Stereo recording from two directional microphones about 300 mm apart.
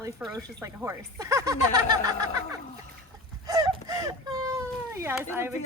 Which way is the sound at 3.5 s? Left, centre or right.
Centre.